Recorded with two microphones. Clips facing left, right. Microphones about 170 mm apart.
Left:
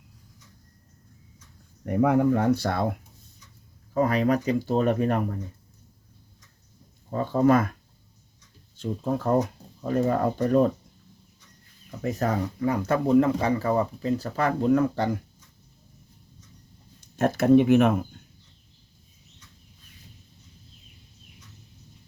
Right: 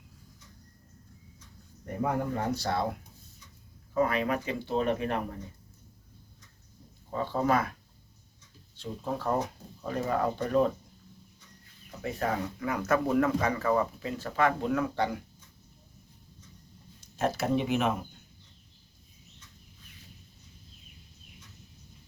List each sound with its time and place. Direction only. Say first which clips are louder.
1.8 s speech: left 9 dB; 70° left (ahead or behind); by 2.8 s 55° left (ahead or behind)
3.9 s speech: left 5 dB; 40° left (ahead or behind)
7.1 s speech: left 7 dB; 45° left (ahead or behind)
8.7 s speech: left 7 dB; 45° left (ahead or behind)
12.0 s speech: left 5 dB; 40° left (ahead or behind)
17.2 s speech: left 9 dB; 50° left (ahead or behind)